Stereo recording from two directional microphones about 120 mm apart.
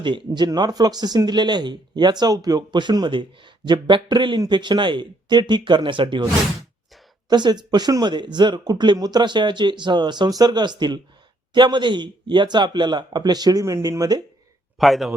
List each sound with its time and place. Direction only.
0.0 s speech: 40° right (ahead or behind)
7.3 s speech: 35° right (ahead or behind)
14.8 s a man's voice: centre (ahead or behind)